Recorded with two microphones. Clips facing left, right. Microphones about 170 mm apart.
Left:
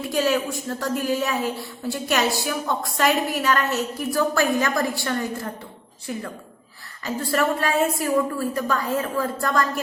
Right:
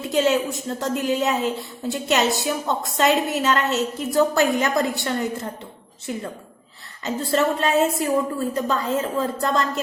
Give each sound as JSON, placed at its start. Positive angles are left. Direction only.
{"t": 0.0, "sound": "a woman's voice", "side_deg": -20}
{"t": 7.0, "sound": "a woman's voice", "side_deg": -20}